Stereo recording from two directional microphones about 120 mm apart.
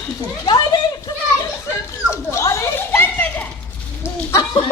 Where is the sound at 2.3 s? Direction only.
25° left (ahead or behind).